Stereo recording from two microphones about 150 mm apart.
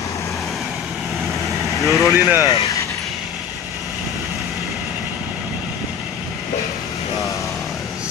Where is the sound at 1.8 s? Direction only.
Centre (ahead or behind).